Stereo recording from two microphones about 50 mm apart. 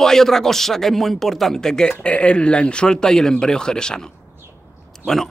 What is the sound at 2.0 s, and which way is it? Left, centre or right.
Speech, left.